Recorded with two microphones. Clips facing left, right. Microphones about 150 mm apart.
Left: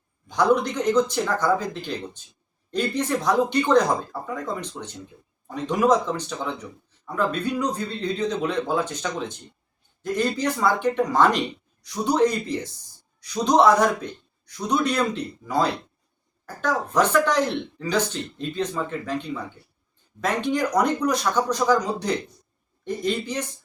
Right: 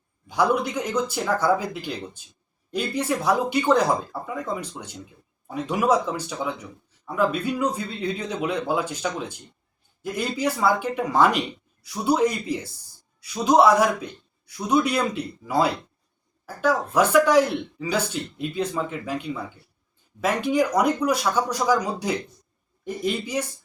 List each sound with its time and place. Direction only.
0.3 s speech: 10° right (ahead or behind)